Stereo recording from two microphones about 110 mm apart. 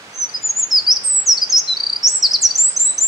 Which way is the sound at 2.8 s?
30° right (ahead or behind).